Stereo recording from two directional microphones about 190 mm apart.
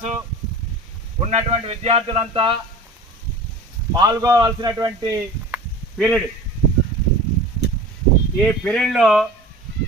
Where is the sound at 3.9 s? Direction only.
20° right (ahead or behind).